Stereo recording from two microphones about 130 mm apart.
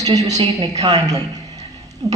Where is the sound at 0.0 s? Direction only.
30° right (ahead or behind).